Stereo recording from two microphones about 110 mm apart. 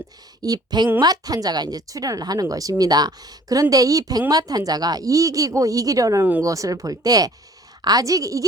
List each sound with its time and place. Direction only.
0.4 s speech: 35° right (ahead or behind)